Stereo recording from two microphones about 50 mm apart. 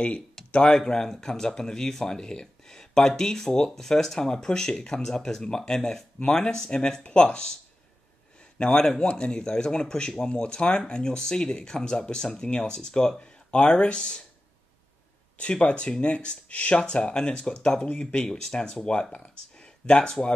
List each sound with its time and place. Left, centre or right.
0.5 s speech: centre
8.5 s speech: centre
15.3 s speech: left